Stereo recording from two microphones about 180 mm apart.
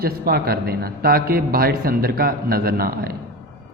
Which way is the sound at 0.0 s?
55° right (ahead or behind).